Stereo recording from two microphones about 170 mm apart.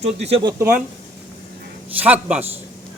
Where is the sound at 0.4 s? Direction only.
15° right (ahead or behind).